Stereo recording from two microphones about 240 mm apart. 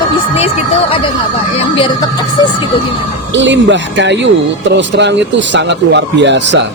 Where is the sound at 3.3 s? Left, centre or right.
Right.